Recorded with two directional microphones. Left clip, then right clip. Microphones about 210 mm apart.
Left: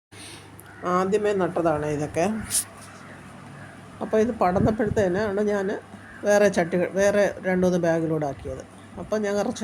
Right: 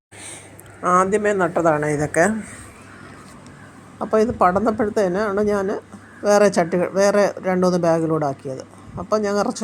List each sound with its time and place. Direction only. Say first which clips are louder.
0.8 s speech: right 6 dB; 20° right (ahead or behind)
4.0 s speech: right 5 dB; 15° right (ahead or behind)